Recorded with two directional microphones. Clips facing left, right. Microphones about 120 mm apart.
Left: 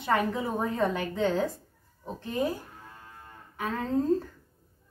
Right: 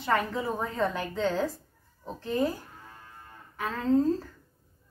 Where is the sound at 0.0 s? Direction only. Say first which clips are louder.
Left 1 dB; 20° left (ahead or behind).